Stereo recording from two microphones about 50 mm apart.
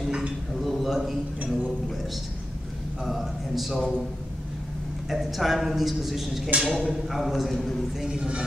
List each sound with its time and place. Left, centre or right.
0.6 s a sound: centre
3.1 s a man's voice: centre
5.1 s a man's voice: centre
8.0 s speech: centre